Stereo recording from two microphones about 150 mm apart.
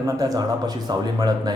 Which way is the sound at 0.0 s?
25° right (ahead or behind).